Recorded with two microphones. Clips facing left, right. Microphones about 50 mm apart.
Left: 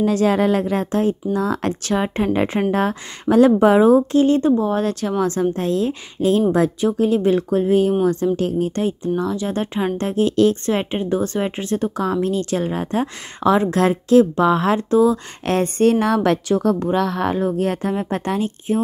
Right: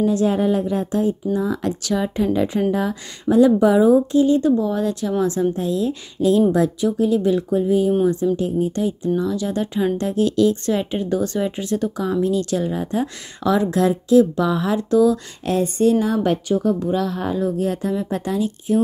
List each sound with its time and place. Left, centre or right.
0.0 s a woman's voice: left
4.4 s a woman's voice: left
14.3 s speech: left
14.6 s a woman's voice: left
14.9 s speech: left
15.4 s a woman's voice: left